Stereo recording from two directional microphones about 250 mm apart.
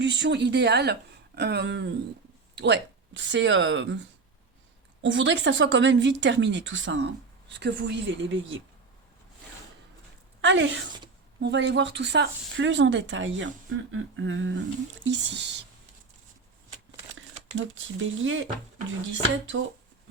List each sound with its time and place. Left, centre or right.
0.0 s speech: right
1.4 s a sound: right
2.6 s speech: right
5.0 s speech: right
10.4 s speech: right
18.1 s speech: right